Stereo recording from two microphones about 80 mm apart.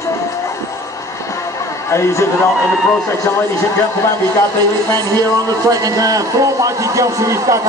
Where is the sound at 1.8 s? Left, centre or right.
Left.